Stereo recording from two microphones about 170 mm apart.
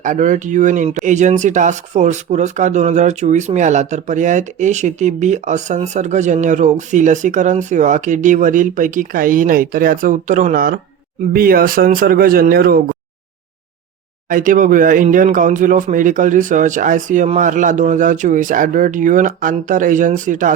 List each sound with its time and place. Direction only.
0.0 s speech: 50° right (ahead or behind)
14.3 s speech: 50° right (ahead or behind)